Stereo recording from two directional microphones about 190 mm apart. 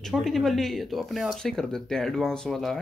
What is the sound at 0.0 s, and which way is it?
Speech, centre (ahead or behind).